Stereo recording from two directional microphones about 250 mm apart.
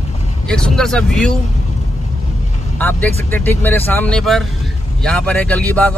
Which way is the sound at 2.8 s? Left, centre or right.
Centre.